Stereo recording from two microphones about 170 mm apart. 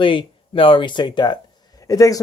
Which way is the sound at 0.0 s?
30° left (ahead or behind).